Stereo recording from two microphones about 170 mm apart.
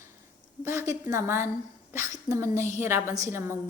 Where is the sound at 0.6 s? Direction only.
15° right (ahead or behind).